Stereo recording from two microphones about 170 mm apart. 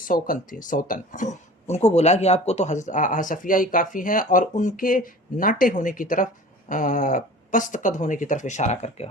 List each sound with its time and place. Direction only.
0.0 s speech: 55° left (ahead or behind)